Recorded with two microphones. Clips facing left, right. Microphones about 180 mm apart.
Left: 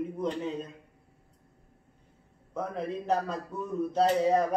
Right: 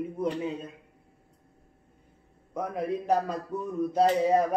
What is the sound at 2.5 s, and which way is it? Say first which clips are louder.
A man's voice: right 3 dB; 10° right (ahead or behind).